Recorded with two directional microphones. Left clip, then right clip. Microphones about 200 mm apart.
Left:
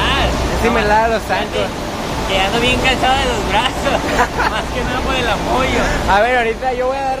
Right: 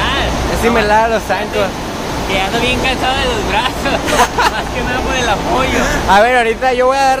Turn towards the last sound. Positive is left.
turn(degrees=-25)  # may be behind; listen again after turning